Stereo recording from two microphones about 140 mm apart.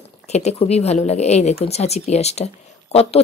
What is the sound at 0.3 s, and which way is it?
Speech, 50° left (ahead or behind).